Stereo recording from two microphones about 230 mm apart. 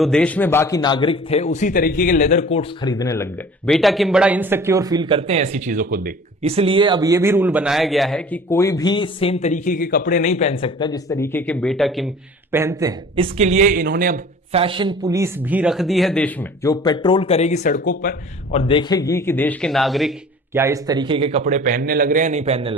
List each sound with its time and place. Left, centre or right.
0.0 s a man's voice: centre
3.7 s speech: centre; by 6.1 s right
6.4 s a man's voice: right; by 12.0 s centre
12.5 s speech: centre
13.1 s speech: right
14.5 s speech: right; by 16.7 s centre
16.8 s speech: centre; by 22.7 s right